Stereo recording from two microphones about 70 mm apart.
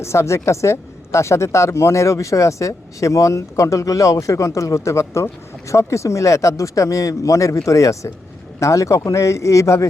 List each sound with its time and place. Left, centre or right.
0.0 s a woman's voice: left